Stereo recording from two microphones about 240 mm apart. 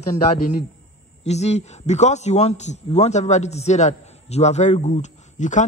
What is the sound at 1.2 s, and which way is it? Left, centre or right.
A man's voice, left.